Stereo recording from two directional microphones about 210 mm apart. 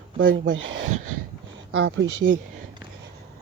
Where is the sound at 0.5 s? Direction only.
65° right (ahead or behind).